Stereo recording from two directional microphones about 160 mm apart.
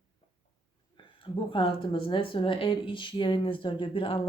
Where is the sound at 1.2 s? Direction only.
35° left (ahead or behind).